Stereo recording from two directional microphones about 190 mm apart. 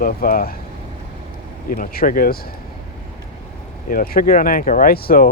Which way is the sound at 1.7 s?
45° left (ahead or behind).